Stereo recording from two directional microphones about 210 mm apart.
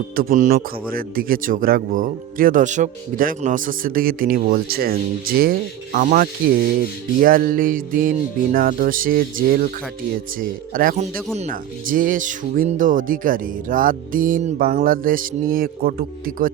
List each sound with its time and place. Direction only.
0.2 s a man's voice: 40° right (ahead or behind)